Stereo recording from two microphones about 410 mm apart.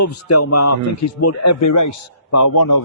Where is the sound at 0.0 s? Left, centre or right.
Left.